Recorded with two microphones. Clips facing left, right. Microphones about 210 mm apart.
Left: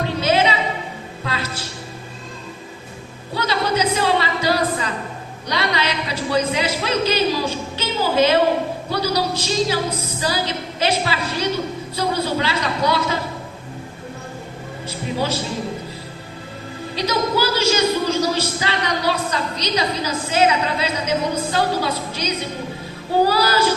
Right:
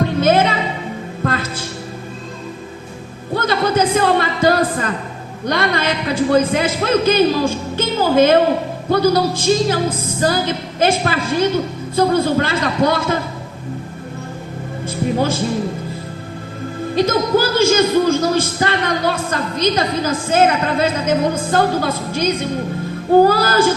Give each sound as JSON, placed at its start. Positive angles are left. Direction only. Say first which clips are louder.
{"t": 0.0, "sound": "music", "louder": "right 4 dB", "side_deg": -50}
{"t": 3.3, "sound": "a sound", "louder": "right 4 dB", "side_deg": -50}
{"t": 5.5, "sound": "speech", "louder": "right 4 dB", "side_deg": -50}
{"t": 14.8, "sound": "music", "louder": "right 6 dB", "side_deg": -50}
{"t": 16.9, "sound": "speech", "louder": "right 6 dB", "side_deg": -50}